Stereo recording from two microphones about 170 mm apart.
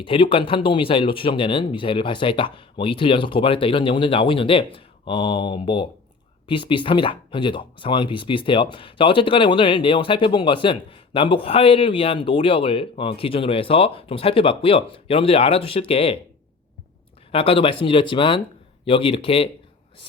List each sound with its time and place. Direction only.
0.0 s speech: 30° left (ahead or behind)
17.3 s speech: 35° left (ahead or behind)